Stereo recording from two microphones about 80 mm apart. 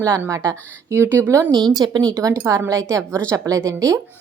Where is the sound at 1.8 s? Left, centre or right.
Right.